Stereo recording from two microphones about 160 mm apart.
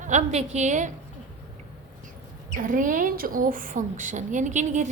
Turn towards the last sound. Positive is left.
turn(degrees=-50)  # may be behind; listen again after turning